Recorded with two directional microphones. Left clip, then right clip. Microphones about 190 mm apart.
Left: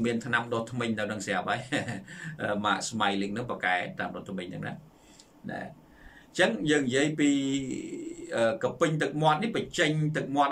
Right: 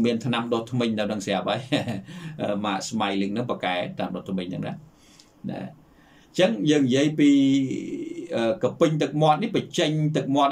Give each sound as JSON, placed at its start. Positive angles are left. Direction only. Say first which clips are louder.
{"t": 0.0, "sound": "speech", "louder": "right 3 dB", "side_deg": -15}